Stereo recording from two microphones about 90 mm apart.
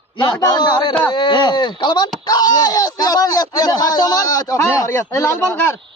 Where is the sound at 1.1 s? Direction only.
60° left (ahead or behind).